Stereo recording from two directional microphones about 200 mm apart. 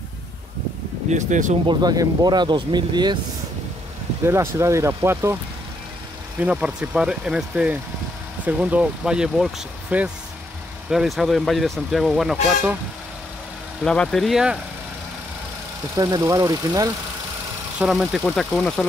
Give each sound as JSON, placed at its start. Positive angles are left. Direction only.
{"t": 1.1, "sound": "speech", "side_deg": -40}
{"t": 1.7, "sound": "speech", "side_deg": -20}
{"t": 4.3, "sound": "speech", "side_deg": -15}
{"t": 6.4, "sound": "speech", "side_deg": -5}
{"t": 13.8, "sound": "speech", "side_deg": 5}
{"t": 16.0, "sound": "speech", "side_deg": -15}
{"t": 17.7, "sound": "speech", "side_deg": -5}